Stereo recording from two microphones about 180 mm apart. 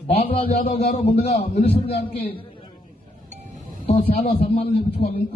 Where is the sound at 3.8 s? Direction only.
35° left (ahead or behind).